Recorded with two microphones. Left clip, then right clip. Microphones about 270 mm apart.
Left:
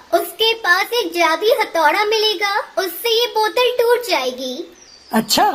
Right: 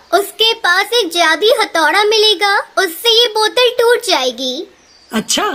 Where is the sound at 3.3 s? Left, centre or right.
Right.